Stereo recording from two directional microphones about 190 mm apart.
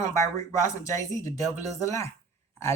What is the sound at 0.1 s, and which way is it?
Speech, 15° left (ahead or behind).